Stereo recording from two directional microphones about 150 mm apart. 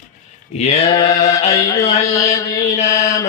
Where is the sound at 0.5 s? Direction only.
45° left (ahead or behind).